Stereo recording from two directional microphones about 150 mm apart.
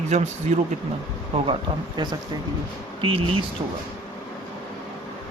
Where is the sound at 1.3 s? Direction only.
40° right (ahead or behind).